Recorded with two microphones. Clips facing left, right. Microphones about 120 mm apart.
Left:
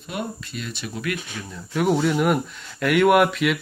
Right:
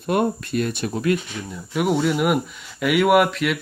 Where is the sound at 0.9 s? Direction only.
30° right (ahead or behind).